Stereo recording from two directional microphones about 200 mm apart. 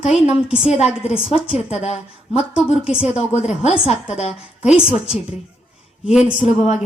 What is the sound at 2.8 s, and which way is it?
Speech, 5° right (ahead or behind).